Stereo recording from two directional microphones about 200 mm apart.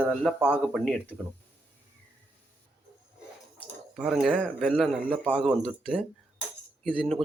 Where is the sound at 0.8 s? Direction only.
5° left (ahead or behind).